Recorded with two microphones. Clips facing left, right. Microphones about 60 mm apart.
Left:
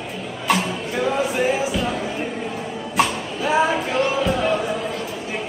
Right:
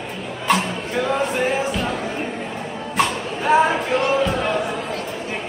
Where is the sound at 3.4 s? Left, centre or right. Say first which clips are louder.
Right 3 dB; right.